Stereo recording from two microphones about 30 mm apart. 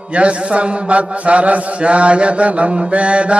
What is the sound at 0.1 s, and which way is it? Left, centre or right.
Mantra, right.